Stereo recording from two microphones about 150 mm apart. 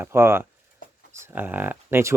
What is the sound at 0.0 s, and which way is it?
Speech, 15° right (ahead or behind).